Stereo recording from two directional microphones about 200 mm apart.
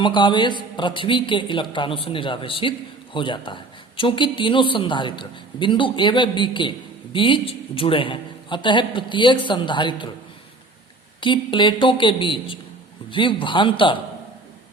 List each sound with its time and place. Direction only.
0.0 s a man's voice: 25° left (ahead or behind)
11.2 s a man's voice: 25° left (ahead or behind)